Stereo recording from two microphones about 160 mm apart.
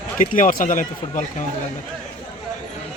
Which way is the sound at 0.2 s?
55° left (ahead or behind).